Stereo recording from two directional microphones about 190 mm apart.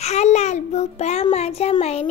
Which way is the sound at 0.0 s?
35° left (ahead or behind).